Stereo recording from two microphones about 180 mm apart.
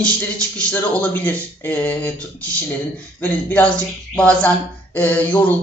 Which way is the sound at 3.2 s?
10° left (ahead or behind).